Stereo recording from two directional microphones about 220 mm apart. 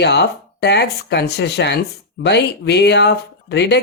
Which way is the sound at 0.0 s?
50° left (ahead or behind).